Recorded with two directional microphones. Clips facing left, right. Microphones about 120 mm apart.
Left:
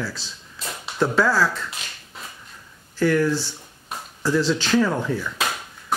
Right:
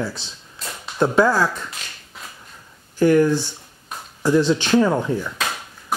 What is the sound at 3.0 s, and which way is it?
Speech, 15° right (ahead or behind).